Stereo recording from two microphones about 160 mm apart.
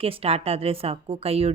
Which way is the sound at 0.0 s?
35° right (ahead or behind).